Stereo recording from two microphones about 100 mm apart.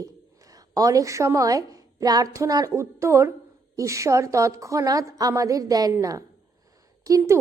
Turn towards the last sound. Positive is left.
turn(degrees=-35)  # may be behind; listen again after turning